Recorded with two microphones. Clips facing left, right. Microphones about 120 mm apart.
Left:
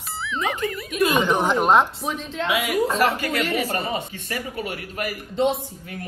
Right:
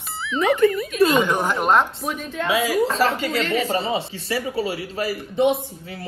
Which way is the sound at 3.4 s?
10° left (ahead or behind).